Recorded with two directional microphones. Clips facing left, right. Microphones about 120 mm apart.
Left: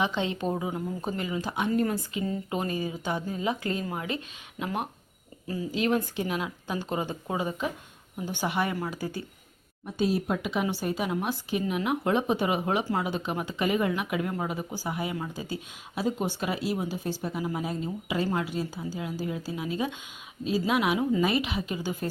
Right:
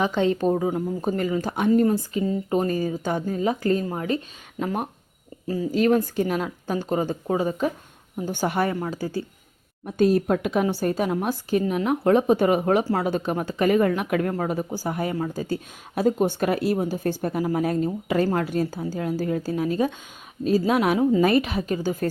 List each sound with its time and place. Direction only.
0.0 s a woman's voice: 45° right (ahead or behind)
8.7 s a woman's voice: 30° right (ahead or behind)
9.8 s speech: 50° right (ahead or behind)